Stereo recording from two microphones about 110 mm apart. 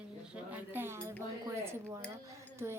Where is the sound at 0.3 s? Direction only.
15° right (ahead or behind).